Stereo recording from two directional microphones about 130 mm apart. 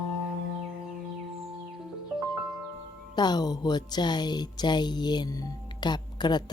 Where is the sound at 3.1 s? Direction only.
30° left (ahead or behind).